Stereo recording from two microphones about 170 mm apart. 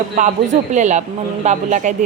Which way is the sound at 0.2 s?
45° right (ahead or behind).